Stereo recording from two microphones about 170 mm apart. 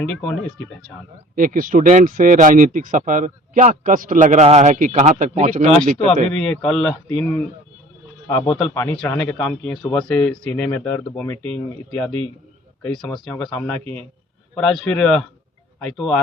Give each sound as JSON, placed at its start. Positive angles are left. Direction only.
{"t": 0.0, "sound": "speech", "side_deg": 5}
{"t": 1.4, "sound": "speech", "side_deg": -50}
{"t": 6.6, "sound": "speech", "side_deg": 5}
{"t": 8.3, "sound": "a man's voice", "side_deg": 20}